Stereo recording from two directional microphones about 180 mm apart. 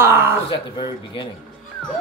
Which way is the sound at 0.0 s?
10° right (ahead or behind).